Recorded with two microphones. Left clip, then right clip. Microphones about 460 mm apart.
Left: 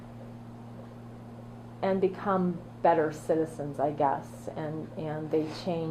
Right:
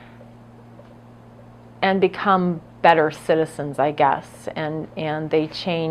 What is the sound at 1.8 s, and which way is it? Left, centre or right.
A woman's voice, right.